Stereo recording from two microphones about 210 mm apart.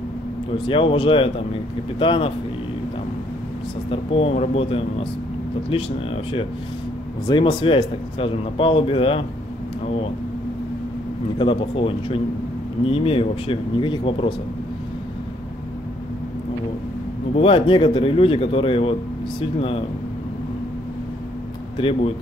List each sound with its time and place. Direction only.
0.7 s speech: 25° left (ahead or behind)
3.9 s speech: 25° left (ahead or behind)
7.2 s speech: 25° left (ahead or behind)
11.3 s speech: 25° left (ahead or behind)
17.4 s speech: 25° left (ahead or behind)
21.7 s speech: 25° left (ahead or behind)